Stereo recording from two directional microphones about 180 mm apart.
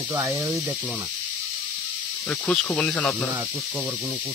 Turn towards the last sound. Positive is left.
turn(degrees=5)  # may be behind; listen again after turning